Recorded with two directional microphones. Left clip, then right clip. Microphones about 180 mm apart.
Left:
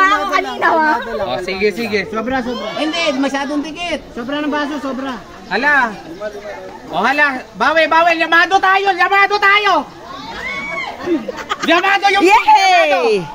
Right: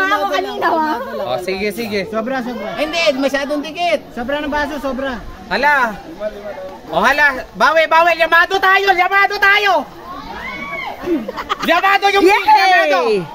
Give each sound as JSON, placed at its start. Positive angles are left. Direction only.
{"t": 0.0, "sound": "a sound", "side_deg": 15}
{"t": 1.3, "sound": "speech", "side_deg": -45}
{"t": 2.8, "sound": "speech", "side_deg": -25}
{"t": 4.3, "sound": "a man's voice", "side_deg": -65}
{"t": 6.9, "sound": "a man's voice", "side_deg": -65}
{"t": 11.4, "sound": "speech", "side_deg": -45}
{"t": 11.7, "sound": "a man's voice", "side_deg": -60}
{"t": 12.3, "sound": "a woman's voice", "side_deg": 5}